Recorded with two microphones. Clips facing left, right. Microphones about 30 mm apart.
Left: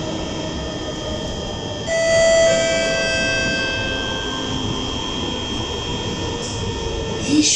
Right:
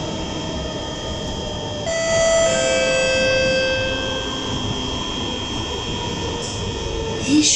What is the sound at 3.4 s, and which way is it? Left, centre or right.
Music, right.